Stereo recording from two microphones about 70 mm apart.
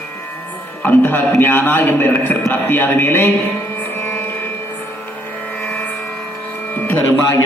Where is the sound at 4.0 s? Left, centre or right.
Left.